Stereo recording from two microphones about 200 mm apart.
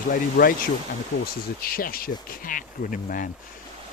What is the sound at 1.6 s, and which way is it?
Speech, 50° left (ahead or behind).